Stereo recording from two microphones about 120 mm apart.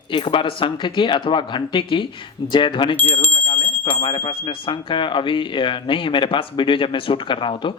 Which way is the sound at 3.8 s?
45° left (ahead or behind).